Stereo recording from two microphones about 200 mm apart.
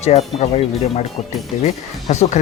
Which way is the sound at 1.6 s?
35° left (ahead or behind).